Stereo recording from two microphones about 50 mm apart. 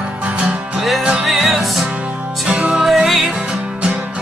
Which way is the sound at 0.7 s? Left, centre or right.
Centre.